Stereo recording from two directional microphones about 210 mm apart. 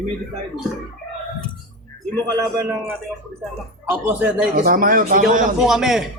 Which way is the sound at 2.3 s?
15° right (ahead or behind).